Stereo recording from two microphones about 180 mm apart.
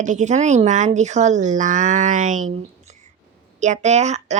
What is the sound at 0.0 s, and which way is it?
A woman's voice, 45° right (ahead or behind).